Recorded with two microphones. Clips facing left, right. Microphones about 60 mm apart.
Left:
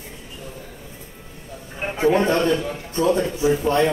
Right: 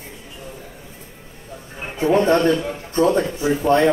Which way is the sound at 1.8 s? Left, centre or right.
Left.